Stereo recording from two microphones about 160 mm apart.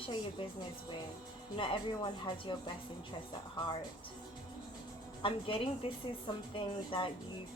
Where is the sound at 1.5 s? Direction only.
30° left (ahead or behind).